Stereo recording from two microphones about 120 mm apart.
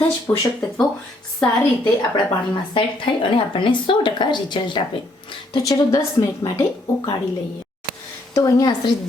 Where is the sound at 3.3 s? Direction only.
45° left (ahead or behind).